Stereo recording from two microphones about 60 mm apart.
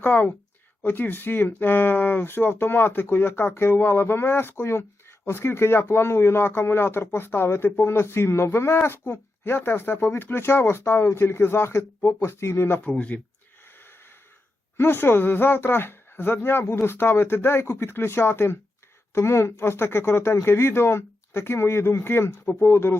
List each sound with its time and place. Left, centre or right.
0.0 s speech: left
12.8 s speech: left
13.7 s snort: left
14.8 s speech: left